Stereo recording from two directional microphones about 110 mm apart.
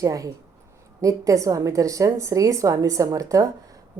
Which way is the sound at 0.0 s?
30° right (ahead or behind).